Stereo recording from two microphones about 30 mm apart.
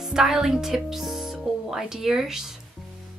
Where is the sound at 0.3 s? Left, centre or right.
Centre.